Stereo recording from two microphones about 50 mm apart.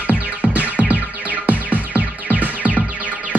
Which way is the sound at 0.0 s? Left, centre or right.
Right.